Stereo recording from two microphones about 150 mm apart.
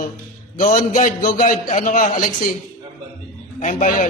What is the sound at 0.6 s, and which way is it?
A man's voice, 60° left (ahead or behind).